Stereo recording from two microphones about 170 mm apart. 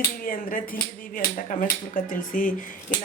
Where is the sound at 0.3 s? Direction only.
55° left (ahead or behind).